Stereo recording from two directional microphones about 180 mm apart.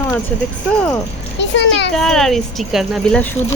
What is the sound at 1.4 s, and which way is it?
Speech, 80° left.